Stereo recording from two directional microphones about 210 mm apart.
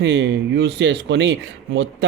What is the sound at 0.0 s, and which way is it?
A man's voice, 55° right (ahead or behind).